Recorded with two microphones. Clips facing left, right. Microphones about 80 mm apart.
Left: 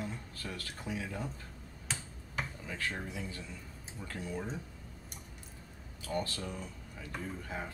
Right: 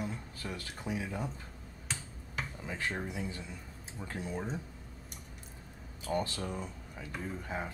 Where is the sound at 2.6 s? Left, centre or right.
Right.